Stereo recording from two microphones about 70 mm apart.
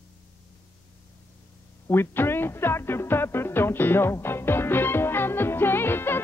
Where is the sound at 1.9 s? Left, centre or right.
Left.